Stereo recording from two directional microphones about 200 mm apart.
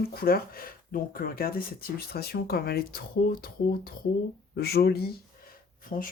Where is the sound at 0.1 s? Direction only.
50° left (ahead or behind).